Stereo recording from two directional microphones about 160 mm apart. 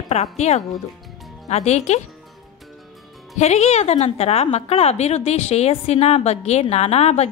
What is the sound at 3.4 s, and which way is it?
A woman's voice, 45° left (ahead or behind).